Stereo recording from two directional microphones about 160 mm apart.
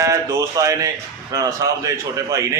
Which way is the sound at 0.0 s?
20° right (ahead or behind).